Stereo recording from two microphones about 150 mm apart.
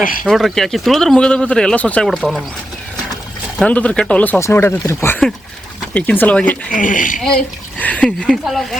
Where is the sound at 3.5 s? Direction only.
10° left (ahead or behind).